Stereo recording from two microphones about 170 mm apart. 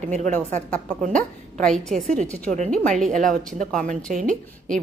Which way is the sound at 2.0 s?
45° right (ahead or behind).